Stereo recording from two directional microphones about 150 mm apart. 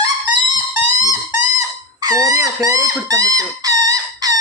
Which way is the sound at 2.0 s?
25° right (ahead or behind).